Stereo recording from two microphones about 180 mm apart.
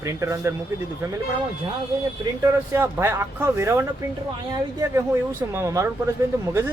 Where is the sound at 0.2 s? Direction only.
15° right (ahead or behind).